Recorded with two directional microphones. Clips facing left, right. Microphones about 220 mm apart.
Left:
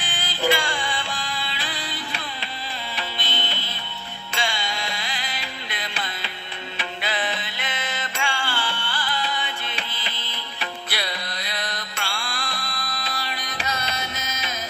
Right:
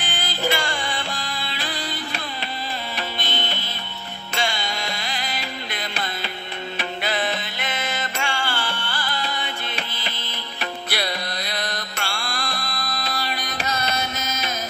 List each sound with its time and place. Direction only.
0.0 s music: 40° right (ahead or behind)